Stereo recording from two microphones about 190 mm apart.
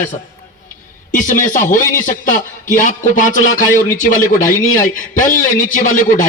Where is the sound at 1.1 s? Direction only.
40° left (ahead or behind).